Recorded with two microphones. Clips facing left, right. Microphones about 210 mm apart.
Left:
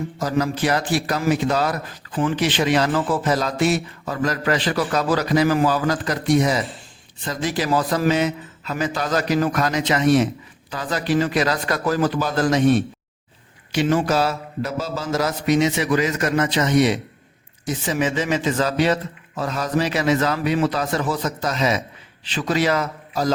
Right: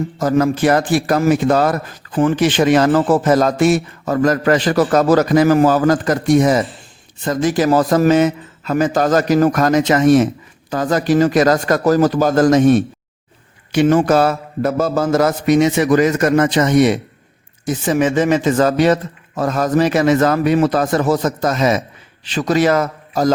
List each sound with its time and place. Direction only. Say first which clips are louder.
0.2 s a man's voice: right 7 dB; 50° right (ahead or behind)